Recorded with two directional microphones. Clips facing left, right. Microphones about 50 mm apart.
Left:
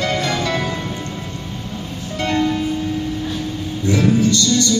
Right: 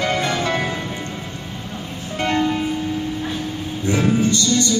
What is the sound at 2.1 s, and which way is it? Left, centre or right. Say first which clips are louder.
Music: left 1 dB; right.